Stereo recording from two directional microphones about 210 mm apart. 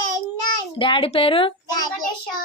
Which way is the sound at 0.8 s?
25° left (ahead or behind).